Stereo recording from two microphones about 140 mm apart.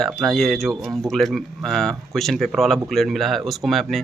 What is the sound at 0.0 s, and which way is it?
Speech, centre (ahead or behind).